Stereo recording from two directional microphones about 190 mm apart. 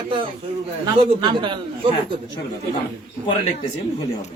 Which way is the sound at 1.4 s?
25° right (ahead or behind).